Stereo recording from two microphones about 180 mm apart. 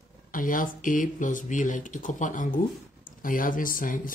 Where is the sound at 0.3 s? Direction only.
50° left (ahead or behind).